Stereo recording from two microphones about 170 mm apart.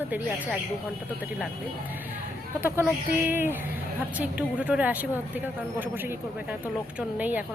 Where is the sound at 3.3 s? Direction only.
15° right (ahead or behind).